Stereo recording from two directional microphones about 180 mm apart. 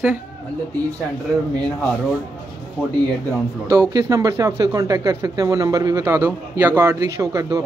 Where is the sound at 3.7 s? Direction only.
20° right (ahead or behind).